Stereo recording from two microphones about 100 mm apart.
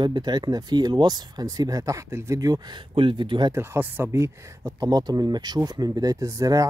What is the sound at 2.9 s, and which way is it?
Speech, 60° right (ahead or behind).